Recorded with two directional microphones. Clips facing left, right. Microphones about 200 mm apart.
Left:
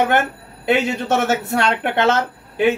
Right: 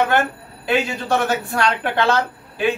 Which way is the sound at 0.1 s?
20° left (ahead or behind).